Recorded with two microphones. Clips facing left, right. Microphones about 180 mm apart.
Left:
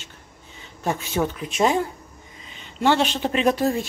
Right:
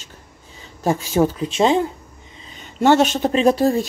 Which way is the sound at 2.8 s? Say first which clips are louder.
Right 5 dB; 45° right (ahead or behind).